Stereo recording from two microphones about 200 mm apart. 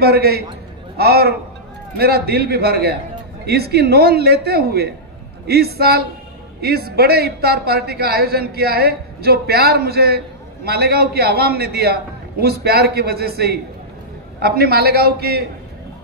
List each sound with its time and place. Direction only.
0.0 s a man's voice: 50° right (ahead or behind)